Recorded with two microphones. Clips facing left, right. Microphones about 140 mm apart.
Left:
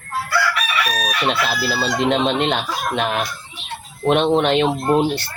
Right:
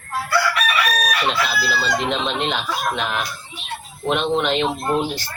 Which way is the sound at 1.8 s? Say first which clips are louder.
Left 6 dB; 50° left (ahead or behind).